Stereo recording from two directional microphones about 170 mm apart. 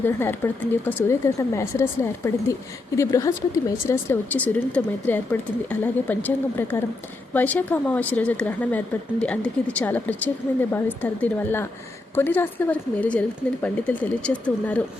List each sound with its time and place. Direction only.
0.0 s speech: 15° left (ahead or behind)